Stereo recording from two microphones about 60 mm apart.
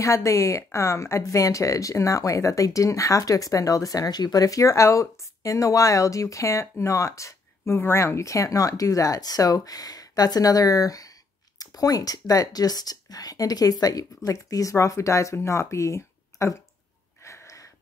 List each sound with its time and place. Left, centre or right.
0.0 s speech: left
15.3 s speech: left
17.2 s wheeze: left